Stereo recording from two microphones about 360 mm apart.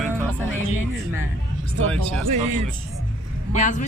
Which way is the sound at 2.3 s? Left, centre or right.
Centre.